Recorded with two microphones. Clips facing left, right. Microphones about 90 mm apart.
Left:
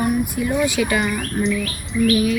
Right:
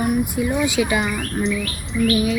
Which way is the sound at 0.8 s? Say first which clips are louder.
Even; 15° right (ahead or behind).